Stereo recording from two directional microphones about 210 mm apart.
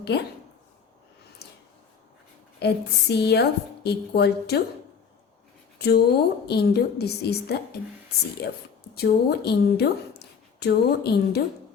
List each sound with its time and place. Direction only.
0.1 s a woman's voice: 50° left (ahead or behind)
1.4 s a sound: 50° left (ahead or behind)
2.6 s a woman's voice: 50° left (ahead or behind)
5.8 s a woman's voice: 50° left (ahead or behind)